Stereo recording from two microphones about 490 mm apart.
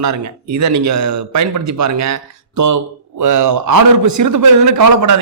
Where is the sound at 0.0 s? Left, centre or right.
Right.